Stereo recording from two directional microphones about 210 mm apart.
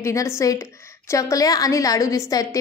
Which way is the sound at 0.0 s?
15° left (ahead or behind).